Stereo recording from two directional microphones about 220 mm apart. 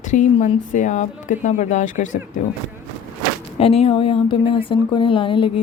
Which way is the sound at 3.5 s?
25° left (ahead or behind).